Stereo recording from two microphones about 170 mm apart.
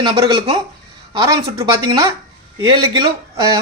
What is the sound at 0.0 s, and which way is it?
Speech, 30° right (ahead or behind).